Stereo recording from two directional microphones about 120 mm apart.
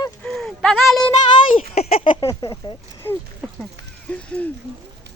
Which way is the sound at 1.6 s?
55° left (ahead or behind).